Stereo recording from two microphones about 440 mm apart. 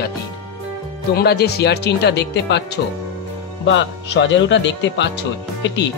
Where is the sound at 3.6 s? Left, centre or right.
Left.